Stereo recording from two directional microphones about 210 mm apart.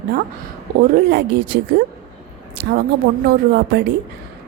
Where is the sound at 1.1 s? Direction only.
50° right (ahead or behind).